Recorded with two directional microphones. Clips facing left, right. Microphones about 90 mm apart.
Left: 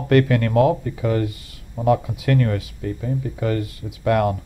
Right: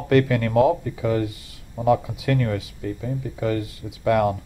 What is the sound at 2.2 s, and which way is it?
Speech, 45° left (ahead or behind).